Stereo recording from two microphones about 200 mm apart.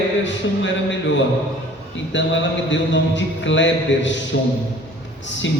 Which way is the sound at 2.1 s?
65° left (ahead or behind).